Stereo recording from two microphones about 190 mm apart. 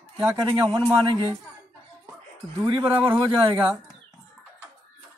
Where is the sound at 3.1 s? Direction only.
25° right (ahead or behind).